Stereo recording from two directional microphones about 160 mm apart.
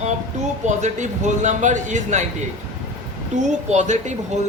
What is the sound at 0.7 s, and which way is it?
A man's voice, 50° right (ahead or behind).